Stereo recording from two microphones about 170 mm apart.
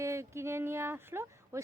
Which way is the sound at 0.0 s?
15° right (ahead or behind).